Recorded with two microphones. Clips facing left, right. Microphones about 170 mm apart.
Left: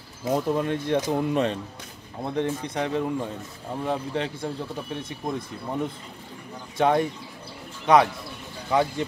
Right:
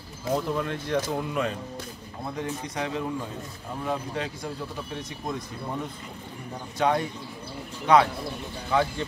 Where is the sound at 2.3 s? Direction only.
30° left (ahead or behind).